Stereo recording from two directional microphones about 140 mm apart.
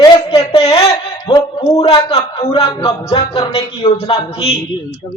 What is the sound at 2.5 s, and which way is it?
Speech, 40° left (ahead or behind).